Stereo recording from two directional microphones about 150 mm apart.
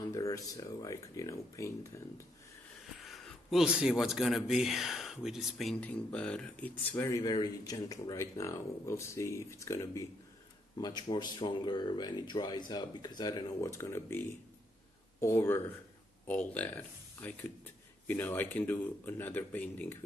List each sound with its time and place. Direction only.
0.1 s speech: 20° left (ahead or behind)
3.0 s speech: centre (ahead or behind)